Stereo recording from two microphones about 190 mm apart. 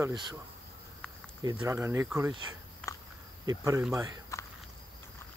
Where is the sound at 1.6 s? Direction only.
15° right (ahead or behind).